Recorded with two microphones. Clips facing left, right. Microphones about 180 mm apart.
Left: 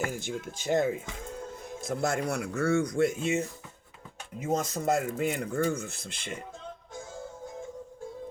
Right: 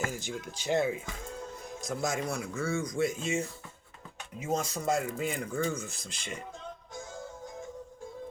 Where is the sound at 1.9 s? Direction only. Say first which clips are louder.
Left 3 dB; 60° left (ahead or behind).